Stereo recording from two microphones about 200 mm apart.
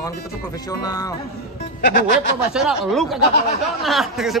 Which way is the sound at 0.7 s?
20° left (ahead or behind).